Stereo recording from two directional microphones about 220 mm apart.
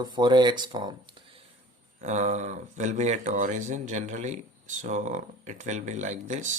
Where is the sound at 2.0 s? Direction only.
30° right (ahead or behind).